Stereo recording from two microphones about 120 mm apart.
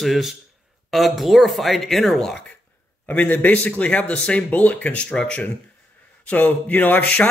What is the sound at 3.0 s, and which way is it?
A man's voice, 15° left (ahead or behind).